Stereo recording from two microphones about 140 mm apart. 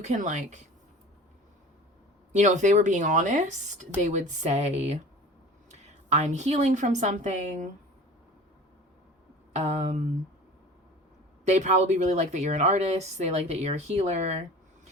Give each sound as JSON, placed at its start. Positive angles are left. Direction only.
{"t": 0.0, "sound": "a woman's voice", "side_deg": -55}
{"t": 2.3, "sound": "a woman's voice", "side_deg": -60}
{"t": 6.1, "sound": "a woman's voice", "side_deg": -55}
{"t": 9.5, "sound": "a woman's voice", "side_deg": -55}
{"t": 11.4, "sound": "a woman's voice", "side_deg": -55}